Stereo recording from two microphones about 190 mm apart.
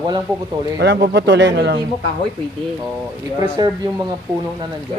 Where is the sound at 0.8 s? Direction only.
55° right (ahead or behind).